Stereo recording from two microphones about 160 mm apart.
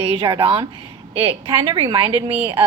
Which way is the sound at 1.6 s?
30° right (ahead or behind).